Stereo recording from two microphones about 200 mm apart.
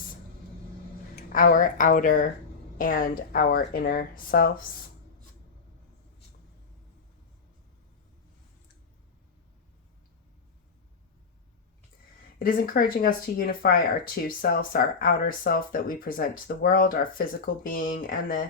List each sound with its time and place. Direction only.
1.1 s speech: 45° left (ahead or behind)
12.4 s speech: 45° left (ahead or behind)